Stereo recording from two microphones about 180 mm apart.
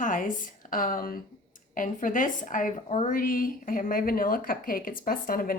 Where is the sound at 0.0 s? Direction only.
45° left (ahead or behind).